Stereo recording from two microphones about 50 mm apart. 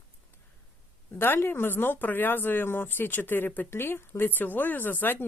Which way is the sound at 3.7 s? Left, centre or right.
Left.